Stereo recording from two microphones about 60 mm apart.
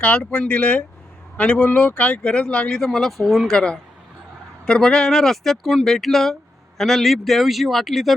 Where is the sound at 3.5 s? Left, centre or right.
Centre.